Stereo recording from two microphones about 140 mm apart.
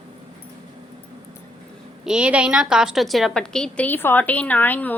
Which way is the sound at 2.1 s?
5° right (ahead or behind).